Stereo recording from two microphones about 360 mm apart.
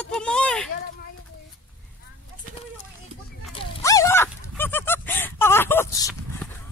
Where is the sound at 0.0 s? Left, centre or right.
Centre.